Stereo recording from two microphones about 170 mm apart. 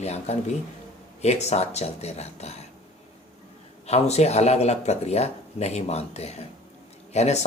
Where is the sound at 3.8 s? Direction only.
40° left (ahead or behind).